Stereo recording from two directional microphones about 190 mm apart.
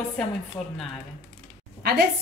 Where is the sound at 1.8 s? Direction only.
55° right (ahead or behind).